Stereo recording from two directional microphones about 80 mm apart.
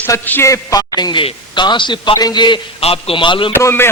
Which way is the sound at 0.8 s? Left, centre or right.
Left.